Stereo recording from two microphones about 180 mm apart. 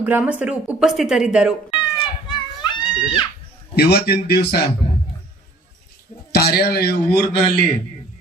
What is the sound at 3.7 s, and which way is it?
Speech, 60° left (ahead or behind).